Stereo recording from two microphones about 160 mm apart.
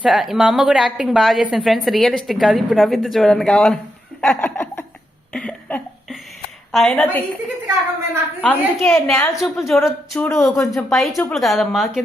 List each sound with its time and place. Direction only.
0.0 s a woman's voice: centre (ahead or behind)
4.2 s laughter: 5° left (ahead or behind)
5.3 s a sound: 5° left (ahead or behind)
6.7 s a woman's voice: centre (ahead or behind)
8.4 s a woman's voice: 10° left (ahead or behind)
9.4 s a woman's voice: centre (ahead or behind)
10.2 s a woman's voice: 15° left (ahead or behind)
10.8 s a woman's voice: centre (ahead or behind)